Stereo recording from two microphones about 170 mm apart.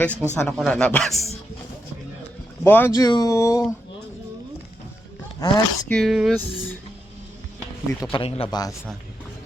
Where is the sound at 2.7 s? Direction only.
10° left (ahead or behind).